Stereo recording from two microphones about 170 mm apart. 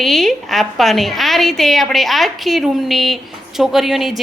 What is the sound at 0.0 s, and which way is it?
Speech, centre (ahead or behind).